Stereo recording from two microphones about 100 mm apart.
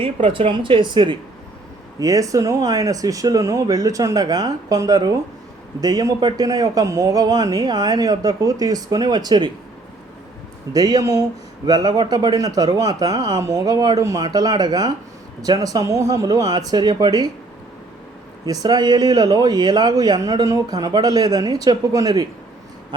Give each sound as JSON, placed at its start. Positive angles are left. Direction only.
{"t": 0.0, "sound": "speech", "side_deg": -65}
{"t": 2.0, "sound": "speech", "side_deg": -35}
{"t": 10.7, "sound": "speech", "side_deg": -40}
{"t": 18.4, "sound": "speech", "side_deg": -40}